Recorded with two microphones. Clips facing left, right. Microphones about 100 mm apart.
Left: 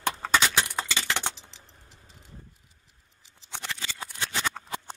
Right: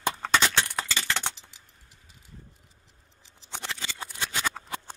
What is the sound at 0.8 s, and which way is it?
Keys jangling, 15° left (ahead or behind).